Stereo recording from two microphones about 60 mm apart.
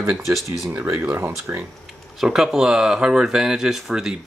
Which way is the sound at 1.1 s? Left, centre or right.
Right.